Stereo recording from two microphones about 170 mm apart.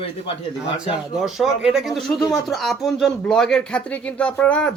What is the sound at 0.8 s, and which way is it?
Speech, centre (ahead or behind).